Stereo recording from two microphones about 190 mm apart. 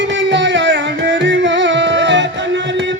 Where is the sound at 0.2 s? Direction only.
70° right (ahead or behind).